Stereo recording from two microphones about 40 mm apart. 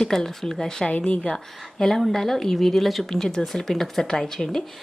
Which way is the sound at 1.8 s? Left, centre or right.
Centre.